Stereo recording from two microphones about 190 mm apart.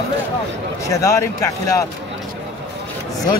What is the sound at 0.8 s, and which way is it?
Speech, 15° left (ahead or behind).